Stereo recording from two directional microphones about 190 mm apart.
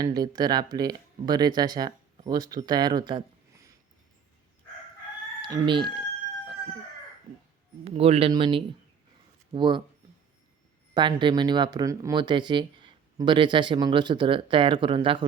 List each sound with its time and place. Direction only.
0.0 s speech: 20° right (ahead or behind)
5.4 s speech: 25° right (ahead or behind)
7.9 s a man's voice: 30° right (ahead or behind)
10.9 s speech: 25° right (ahead or behind)